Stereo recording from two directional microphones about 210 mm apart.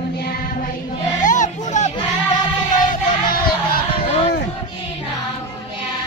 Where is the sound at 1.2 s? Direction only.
35° left (ahead or behind).